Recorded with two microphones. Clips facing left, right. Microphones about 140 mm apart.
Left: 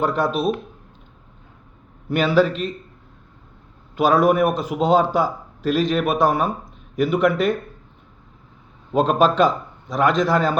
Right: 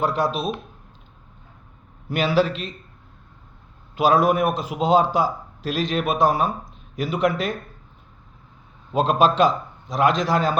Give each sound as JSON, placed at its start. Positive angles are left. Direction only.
{"t": 0.1, "sound": "a man's voice", "side_deg": 50}
{"t": 2.0, "sound": "a man's voice", "side_deg": 50}
{"t": 3.9, "sound": "a man's voice", "side_deg": 45}
{"t": 9.0, "sound": "a man's voice", "side_deg": 50}